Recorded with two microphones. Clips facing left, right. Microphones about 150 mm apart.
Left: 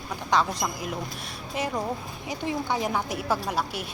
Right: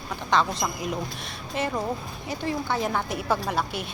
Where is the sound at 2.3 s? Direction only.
15° left (ahead or behind).